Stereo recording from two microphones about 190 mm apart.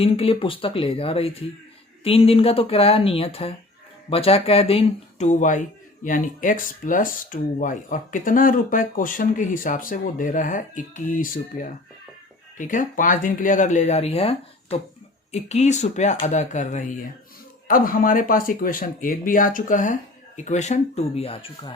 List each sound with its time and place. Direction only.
0.0 s speech: 30° left (ahead or behind)